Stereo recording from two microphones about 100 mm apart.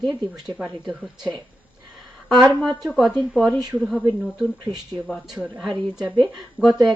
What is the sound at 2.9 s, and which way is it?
Speech, centre (ahead or behind).